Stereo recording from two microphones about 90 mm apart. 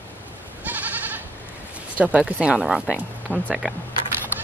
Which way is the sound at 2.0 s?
15° right (ahead or behind).